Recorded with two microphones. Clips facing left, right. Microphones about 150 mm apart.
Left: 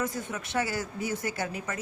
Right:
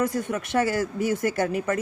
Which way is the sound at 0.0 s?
50° right (ahead or behind).